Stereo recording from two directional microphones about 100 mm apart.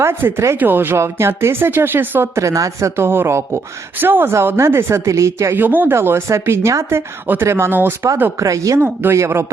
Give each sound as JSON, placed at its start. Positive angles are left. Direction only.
{"t": 0.0, "sound": "speech", "side_deg": -25}
{"t": 5.5, "sound": "speech", "side_deg": -20}
{"t": 8.4, "sound": "speech", "side_deg": -35}